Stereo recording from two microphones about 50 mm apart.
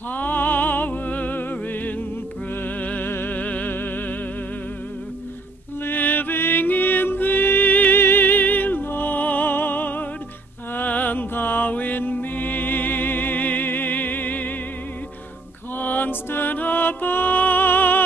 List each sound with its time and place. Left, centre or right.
0.1 s music: left
5.9 s music: left
15.8 s music: left